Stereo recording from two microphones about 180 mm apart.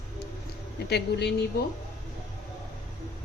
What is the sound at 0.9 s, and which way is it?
Speech, 65° left (ahead or behind).